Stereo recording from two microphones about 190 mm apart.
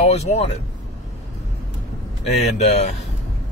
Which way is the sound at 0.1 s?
35° left (ahead or behind).